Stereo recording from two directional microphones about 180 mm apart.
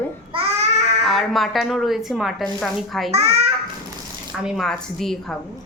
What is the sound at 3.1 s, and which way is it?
Speech, 35° right (ahead or behind).